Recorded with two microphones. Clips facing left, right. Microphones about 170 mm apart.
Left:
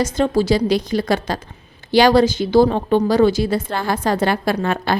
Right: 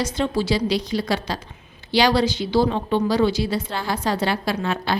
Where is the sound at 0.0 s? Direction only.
45° left (ahead or behind).